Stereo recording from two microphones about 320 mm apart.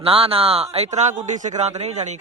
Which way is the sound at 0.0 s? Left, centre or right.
Centre.